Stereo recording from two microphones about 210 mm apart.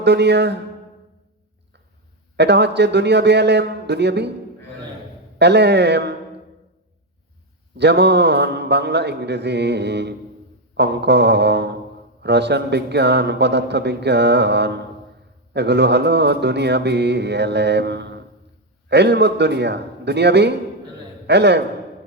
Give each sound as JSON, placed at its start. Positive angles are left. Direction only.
{"t": 0.0, "sound": "speech", "side_deg": -55}
{"t": 2.3, "sound": "speech", "side_deg": -55}
{"t": 5.4, "sound": "speech", "side_deg": -55}
{"t": 7.8, "sound": "speech", "side_deg": -55}